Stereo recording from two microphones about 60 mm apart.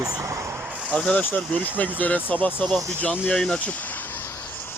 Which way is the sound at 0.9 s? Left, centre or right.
Centre.